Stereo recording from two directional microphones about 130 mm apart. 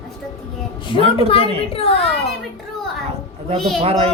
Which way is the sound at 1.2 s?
45° left (ahead or behind).